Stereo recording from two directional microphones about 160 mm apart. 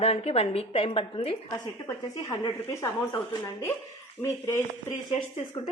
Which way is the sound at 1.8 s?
20° left (ahead or behind).